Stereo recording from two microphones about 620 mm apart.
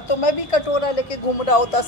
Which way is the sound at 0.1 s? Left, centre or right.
Left.